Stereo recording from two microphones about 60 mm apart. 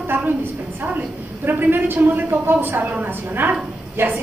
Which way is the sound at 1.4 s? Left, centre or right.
Right.